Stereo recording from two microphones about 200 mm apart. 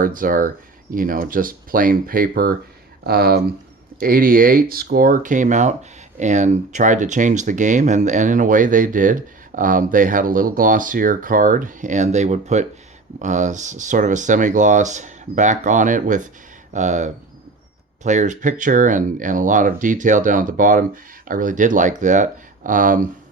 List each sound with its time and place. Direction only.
0.0 s speech: 45° right (ahead or behind)